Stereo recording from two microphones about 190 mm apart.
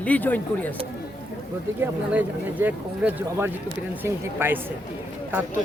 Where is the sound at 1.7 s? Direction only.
10° right (ahead or behind).